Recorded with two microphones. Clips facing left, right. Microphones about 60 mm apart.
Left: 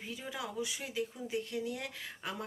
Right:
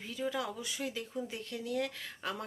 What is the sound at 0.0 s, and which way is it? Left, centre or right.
Speech, centre.